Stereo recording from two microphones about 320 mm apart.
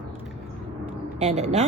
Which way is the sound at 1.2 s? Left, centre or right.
Centre.